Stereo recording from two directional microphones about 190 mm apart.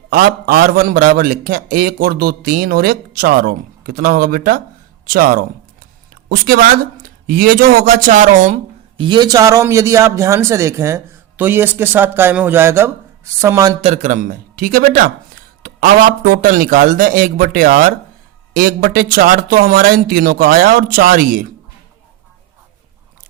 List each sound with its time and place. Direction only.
0.1 s a man's voice: 50° right (ahead or behind); by 13.7 s 15° right (ahead or behind)
13.8 s a man's voice: 40° right (ahead or behind)